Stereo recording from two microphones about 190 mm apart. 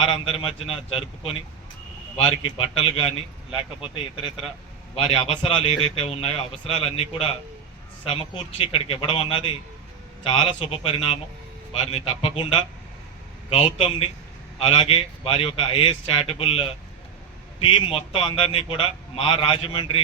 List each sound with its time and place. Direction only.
0.0 s a man's voice: 30° left (ahead or behind)